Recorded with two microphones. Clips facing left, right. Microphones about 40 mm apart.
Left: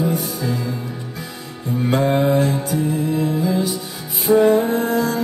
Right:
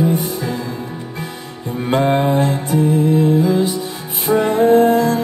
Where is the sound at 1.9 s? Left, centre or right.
Right.